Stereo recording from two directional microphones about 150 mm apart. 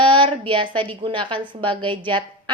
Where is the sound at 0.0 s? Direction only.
35° right (ahead or behind).